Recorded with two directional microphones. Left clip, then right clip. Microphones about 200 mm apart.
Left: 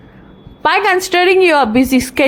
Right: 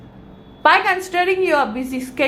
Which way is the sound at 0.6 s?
50° left (ahead or behind).